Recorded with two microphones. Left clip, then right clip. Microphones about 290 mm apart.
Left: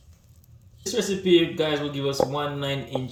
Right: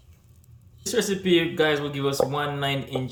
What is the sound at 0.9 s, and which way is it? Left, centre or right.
Speech, centre.